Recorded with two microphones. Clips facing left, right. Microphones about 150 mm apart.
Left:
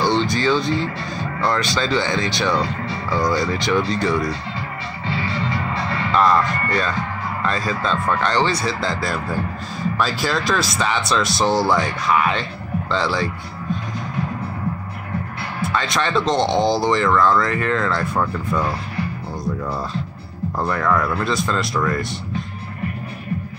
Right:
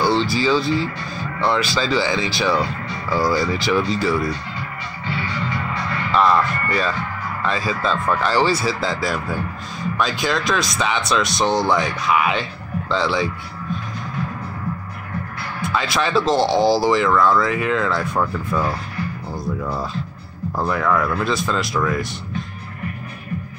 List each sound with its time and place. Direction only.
0.0 s speech: 5° right (ahead or behind)
5.1 s music: 30° left (ahead or behind)
6.1 s speech: centre (ahead or behind)
15.6 s speech: 5° right (ahead or behind)